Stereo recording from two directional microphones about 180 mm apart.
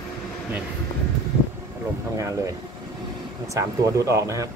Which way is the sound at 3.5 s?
15° right (ahead or behind).